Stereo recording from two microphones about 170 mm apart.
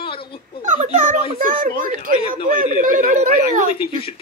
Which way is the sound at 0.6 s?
45° right (ahead or behind).